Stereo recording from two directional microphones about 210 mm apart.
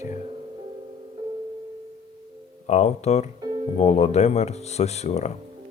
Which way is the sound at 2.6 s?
35° left (ahead or behind).